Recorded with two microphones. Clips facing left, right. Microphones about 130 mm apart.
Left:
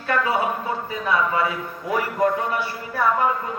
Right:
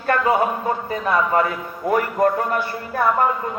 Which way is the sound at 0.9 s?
50° right (ahead or behind).